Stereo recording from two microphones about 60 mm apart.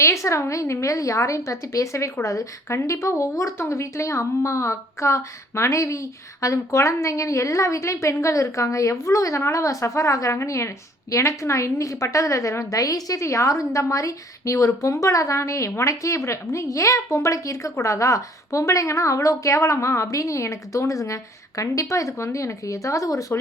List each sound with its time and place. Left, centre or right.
0.0 s a woman's voice: left
13.2 s a woman's voice: left
20.1 s a woman's voice: left